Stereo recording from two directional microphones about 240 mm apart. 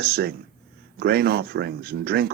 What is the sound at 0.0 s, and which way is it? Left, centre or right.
Speech, right.